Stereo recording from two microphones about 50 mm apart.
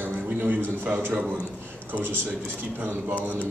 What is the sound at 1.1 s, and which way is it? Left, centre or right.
Speech, right.